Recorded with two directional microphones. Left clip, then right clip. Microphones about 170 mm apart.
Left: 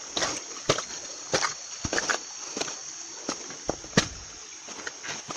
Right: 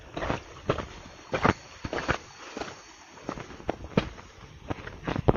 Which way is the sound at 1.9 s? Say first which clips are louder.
Left 2 dB; 15° left (ahead or behind).